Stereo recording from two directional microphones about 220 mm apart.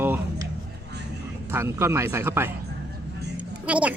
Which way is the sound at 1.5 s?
10° right (ahead or behind).